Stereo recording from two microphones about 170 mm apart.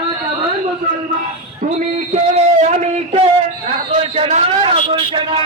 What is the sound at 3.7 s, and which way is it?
A man's voice, 35° right (ahead or behind).